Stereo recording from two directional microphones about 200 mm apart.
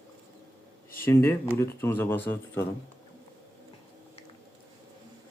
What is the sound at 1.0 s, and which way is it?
A child's voice, 10° left (ahead or behind).